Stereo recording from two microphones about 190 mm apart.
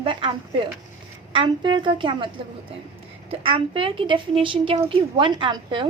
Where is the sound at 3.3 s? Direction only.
30° right (ahead or behind).